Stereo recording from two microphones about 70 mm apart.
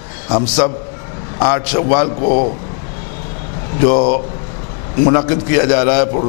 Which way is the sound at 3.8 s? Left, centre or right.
Centre.